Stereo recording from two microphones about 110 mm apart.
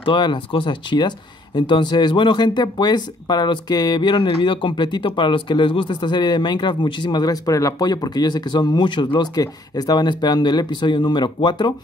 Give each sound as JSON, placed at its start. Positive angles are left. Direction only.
{"t": 0.0, "sound": "speech", "side_deg": 50}